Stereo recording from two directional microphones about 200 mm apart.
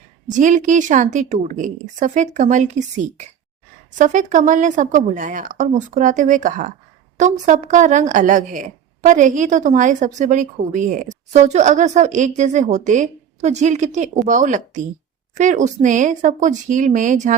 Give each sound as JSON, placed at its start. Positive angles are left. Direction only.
{"t": 0.3, "sound": "speech", "side_deg": -40}